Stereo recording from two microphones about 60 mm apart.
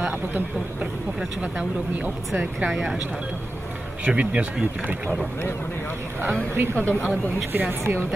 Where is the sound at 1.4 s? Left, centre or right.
Right.